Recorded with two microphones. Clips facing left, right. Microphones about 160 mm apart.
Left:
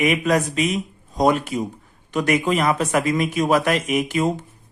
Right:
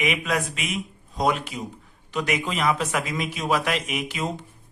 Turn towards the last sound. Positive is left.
turn(degrees=45)  # may be behind; listen again after turning